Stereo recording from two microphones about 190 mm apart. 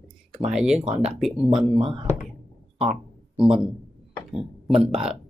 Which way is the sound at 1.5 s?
25° right (ahead or behind).